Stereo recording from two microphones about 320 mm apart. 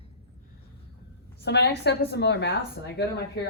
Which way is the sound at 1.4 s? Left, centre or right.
Left.